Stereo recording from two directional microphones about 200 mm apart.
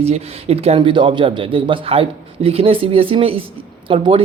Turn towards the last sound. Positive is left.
turn(degrees=-25)  # may be behind; listen again after turning